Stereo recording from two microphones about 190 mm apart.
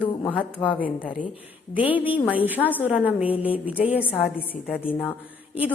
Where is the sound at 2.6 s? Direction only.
10° left (ahead or behind).